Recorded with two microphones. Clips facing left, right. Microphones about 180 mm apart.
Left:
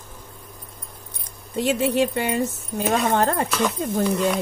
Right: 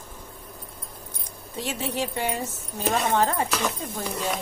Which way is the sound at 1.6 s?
60° left (ahead or behind).